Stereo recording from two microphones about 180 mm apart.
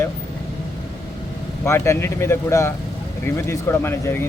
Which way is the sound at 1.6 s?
15° left (ahead or behind).